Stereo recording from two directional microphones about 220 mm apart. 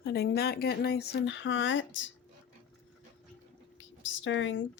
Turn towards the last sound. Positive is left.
turn(degrees=55)  # may be behind; listen again after turning